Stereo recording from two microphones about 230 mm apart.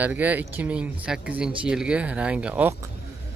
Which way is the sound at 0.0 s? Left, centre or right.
Centre.